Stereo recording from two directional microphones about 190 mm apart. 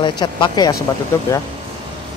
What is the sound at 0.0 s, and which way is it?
Speech, 25° left (ahead or behind).